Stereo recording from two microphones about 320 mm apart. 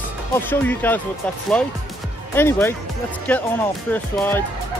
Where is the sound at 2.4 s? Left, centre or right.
Centre.